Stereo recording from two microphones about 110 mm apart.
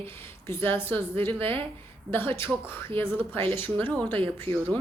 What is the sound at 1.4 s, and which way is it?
Speech, 55° right (ahead or behind).